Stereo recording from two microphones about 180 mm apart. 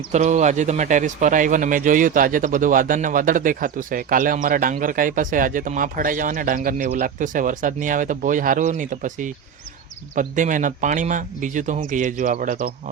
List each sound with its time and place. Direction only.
0.1 s speech: 40° right (ahead or behind)